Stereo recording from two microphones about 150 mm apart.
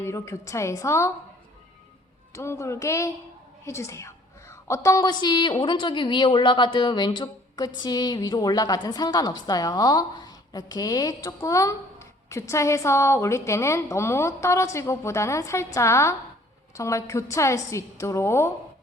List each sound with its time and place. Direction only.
0.0 s a woman's voice: 20° left (ahead or behind)
2.3 s a woman's voice: 20° left (ahead or behind)